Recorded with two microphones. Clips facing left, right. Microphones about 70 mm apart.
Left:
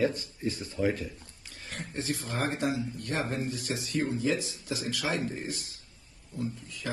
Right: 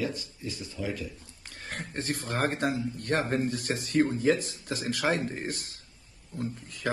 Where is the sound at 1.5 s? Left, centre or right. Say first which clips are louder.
Right 1 dB; right.